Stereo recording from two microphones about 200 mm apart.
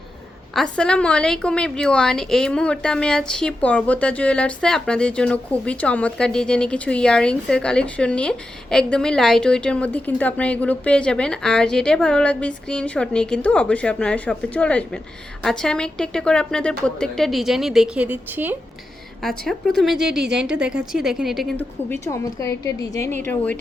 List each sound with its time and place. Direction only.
0.5 s a woman's voice: 5° left (ahead or behind)
19.2 s a woman's voice: centre (ahead or behind)
22.0 s a woman's voice: 15° left (ahead or behind)